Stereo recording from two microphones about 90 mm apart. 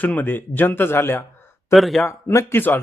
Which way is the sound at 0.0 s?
20° left (ahead or behind).